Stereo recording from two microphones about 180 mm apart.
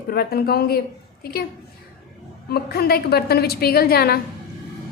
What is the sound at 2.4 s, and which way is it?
A woman's voice, 60° left (ahead or behind).